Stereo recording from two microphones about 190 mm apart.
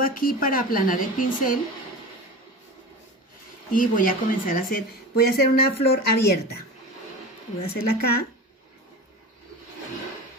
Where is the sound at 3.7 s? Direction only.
45° left (ahead or behind).